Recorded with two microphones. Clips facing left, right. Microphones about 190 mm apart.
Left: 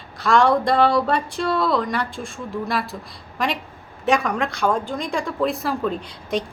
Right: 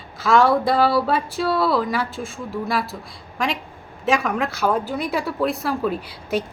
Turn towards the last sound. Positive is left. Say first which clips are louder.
# right 1 dB
turn(degrees=-5)  # may be behind; listen again after turning